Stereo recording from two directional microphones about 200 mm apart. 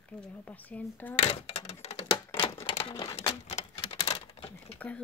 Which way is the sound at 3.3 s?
35° left (ahead or behind).